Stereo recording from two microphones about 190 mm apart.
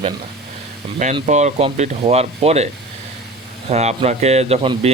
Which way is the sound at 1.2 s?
35° right (ahead or behind).